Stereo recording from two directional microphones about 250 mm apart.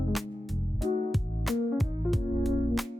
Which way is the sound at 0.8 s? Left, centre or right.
Centre.